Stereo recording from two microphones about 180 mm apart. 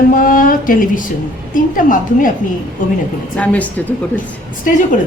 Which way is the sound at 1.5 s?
50° left (ahead or behind).